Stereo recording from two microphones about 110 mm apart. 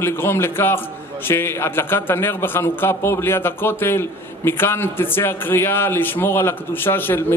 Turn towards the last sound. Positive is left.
turn(degrees=20)  # may be behind; listen again after turning